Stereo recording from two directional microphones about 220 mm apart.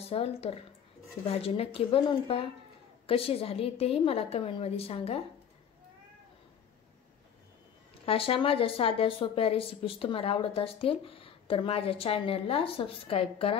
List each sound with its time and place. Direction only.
0.0 s a woman's voice: 25° left (ahead or behind)
8.0 s a woman's voice: 25° left (ahead or behind)